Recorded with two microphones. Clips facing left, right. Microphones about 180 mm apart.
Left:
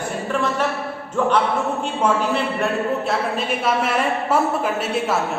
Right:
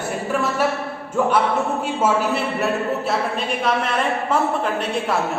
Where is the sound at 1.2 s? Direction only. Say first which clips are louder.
Even; 10° right (ahead or behind).